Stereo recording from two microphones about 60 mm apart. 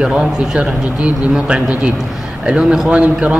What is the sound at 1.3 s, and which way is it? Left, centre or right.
A man's voice, centre.